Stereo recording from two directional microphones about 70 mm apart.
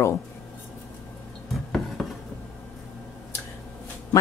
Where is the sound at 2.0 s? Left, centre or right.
Centre.